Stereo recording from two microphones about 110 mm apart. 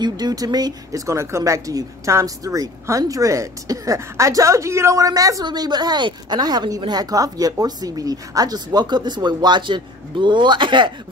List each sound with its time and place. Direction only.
0.0 s speech: 35° right (ahead or behind)